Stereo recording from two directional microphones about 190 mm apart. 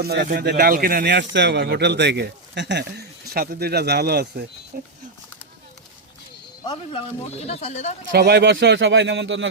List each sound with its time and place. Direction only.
0.0 s speech: 55° right (ahead or behind)
7.3 s speech: 35° left (ahead or behind)
8.1 s speech: 60° right (ahead or behind); by 9.5 s 75° right (ahead or behind)